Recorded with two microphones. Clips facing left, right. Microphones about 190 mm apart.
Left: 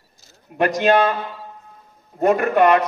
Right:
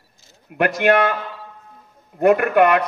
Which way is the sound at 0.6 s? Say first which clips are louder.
Even; 65° right (ahead or behind).